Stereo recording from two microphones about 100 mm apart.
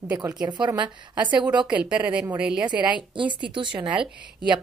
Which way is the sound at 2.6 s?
50° right (ahead or behind).